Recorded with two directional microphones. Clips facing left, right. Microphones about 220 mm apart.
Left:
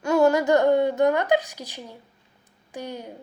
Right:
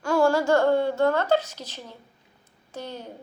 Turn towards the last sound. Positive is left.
turn(degrees=15)  # may be behind; listen again after turning